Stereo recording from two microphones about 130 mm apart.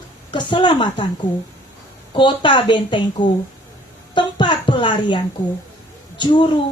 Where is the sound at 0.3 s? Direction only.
40° left (ahead or behind).